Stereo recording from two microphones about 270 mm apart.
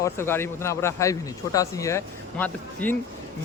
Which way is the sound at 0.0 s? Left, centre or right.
Centre.